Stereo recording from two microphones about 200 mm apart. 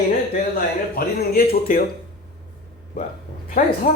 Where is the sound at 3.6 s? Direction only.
45° left (ahead or behind).